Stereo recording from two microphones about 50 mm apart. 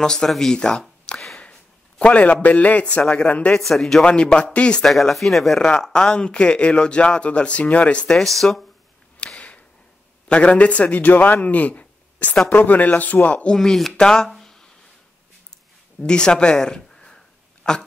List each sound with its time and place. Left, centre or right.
0.0 s speech: centre
3.3 s speech: left
3.5 s speech: centre
4.0 s speech: centre
4.8 s speech: centre
5.9 s speech: centre
8.2 s speech: centre
9.2 s a sound: left
10.2 s a man's voice: left
13.6 s speech: centre
16.1 s speech: centre